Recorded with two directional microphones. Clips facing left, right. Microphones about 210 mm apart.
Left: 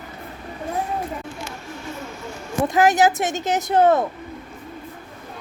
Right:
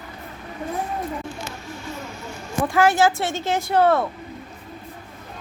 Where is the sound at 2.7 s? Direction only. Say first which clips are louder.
Left 1 dB; 20° left (ahead or behind).